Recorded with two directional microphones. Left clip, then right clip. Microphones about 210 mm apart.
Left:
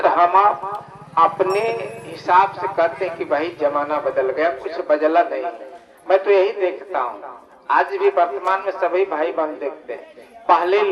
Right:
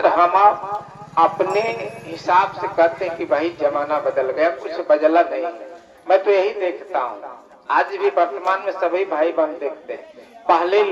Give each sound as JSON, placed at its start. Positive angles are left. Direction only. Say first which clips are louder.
{"t": 0.0, "sound": "speech", "louder": "right 1 dB", "side_deg": 25}